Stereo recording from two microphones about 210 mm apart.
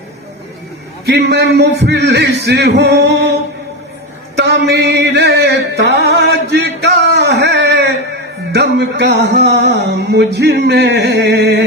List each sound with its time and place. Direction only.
1.0 s a man's voice: 50° right (ahead or behind)
4.4 s music: 55° right (ahead or behind)
8.5 s a man's voice: 50° right (ahead or behind)